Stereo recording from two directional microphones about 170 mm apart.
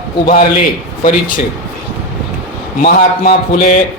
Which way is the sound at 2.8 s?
50° left (ahead or behind).